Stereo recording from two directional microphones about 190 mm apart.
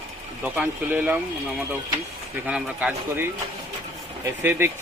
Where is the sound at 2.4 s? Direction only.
5° right (ahead or behind).